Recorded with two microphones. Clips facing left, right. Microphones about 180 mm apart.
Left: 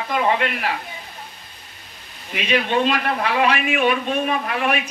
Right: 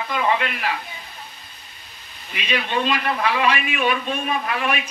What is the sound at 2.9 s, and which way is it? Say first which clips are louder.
A man's voice: left 1 dB; 55° left (ahead or behind).